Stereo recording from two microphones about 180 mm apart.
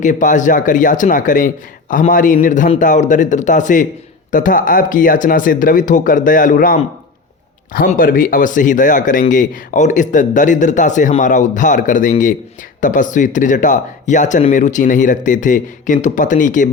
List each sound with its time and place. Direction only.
0.0 s speech: 45° left (ahead or behind)